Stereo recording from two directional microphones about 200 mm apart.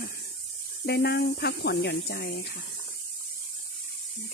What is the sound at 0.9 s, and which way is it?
Speech, 55° left (ahead or behind).